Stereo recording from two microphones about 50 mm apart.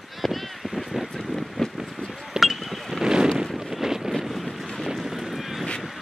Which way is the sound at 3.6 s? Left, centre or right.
Centre.